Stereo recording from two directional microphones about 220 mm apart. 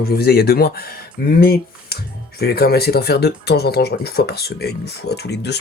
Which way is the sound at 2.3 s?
45° left (ahead or behind).